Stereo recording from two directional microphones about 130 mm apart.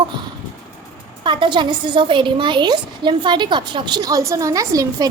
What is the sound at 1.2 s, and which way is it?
A woman's voice, 40° right (ahead or behind).